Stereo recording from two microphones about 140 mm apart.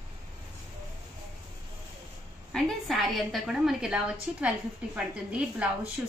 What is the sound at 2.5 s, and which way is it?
A woman's voice, centre (ahead or behind).